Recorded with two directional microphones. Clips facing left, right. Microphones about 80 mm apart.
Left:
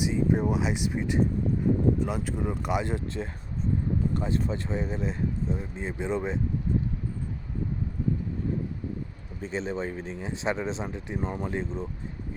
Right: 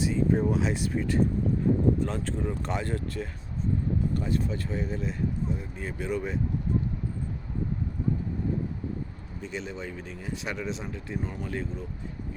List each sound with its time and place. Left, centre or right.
0.0 s speech: centre
9.4 s speech: left